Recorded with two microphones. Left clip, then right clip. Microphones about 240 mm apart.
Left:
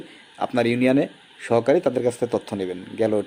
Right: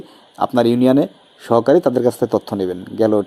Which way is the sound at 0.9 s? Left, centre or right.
Centre.